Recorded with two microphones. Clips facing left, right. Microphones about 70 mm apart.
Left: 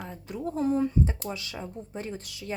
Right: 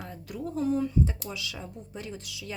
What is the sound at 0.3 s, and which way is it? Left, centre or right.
Speech, left.